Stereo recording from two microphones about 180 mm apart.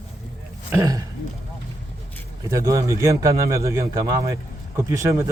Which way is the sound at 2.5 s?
15° right (ahead or behind).